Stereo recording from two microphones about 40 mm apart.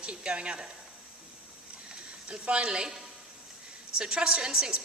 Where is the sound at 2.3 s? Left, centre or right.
Right.